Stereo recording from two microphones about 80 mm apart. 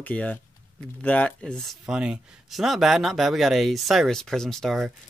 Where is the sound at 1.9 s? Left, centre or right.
Centre.